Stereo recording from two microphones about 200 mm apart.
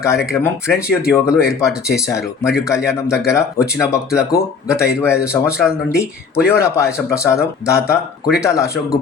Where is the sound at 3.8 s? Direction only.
5° right (ahead or behind).